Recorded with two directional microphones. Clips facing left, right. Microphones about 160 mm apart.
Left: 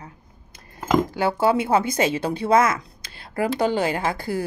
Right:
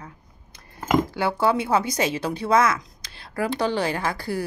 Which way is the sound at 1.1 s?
45° left (ahead or behind).